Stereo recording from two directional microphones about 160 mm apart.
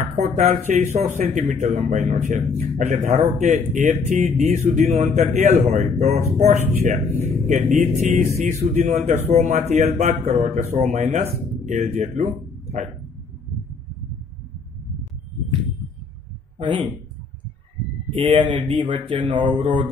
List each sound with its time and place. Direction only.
0.1 s speech: 45° right (ahead or behind)
16.5 s a man's voice: 30° right (ahead or behind)
18.1 s speech: 30° right (ahead or behind)